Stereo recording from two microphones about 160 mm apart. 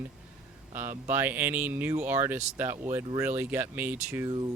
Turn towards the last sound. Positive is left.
turn(degrees=-10)  # may be behind; listen again after turning